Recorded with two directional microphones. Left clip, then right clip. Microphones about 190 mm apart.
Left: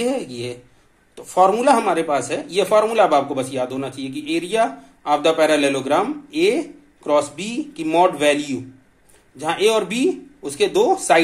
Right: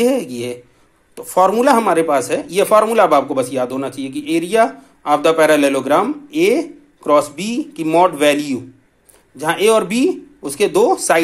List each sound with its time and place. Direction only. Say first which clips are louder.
0.0 s a man's voice: right 6 dB; 35° right (ahead or behind)